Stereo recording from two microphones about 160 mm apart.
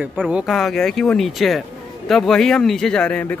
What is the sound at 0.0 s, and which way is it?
Speech, 10° right (ahead or behind).